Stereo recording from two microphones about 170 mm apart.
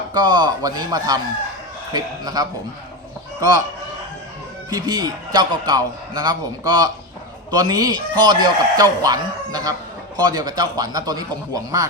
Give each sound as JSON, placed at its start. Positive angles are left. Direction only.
{"t": 0.1, "sound": "a man's voice", "side_deg": -25}
{"t": 4.7, "sound": "a man's voice", "side_deg": -25}